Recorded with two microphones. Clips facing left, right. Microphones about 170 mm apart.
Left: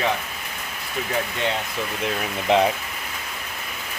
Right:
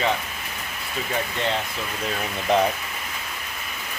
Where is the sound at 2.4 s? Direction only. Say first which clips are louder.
Left 2 dB; 20° left (ahead or behind).